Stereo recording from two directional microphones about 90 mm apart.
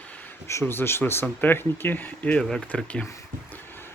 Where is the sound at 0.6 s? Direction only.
25° left (ahead or behind).